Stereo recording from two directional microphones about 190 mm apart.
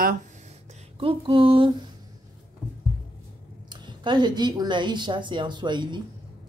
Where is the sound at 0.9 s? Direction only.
30° right (ahead or behind).